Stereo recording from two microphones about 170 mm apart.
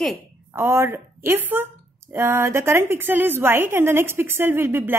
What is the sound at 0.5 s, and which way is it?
A woman's voice, 15° right (ahead or behind).